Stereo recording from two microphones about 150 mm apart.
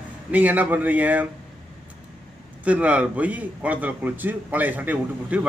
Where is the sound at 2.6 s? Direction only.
10° right (ahead or behind).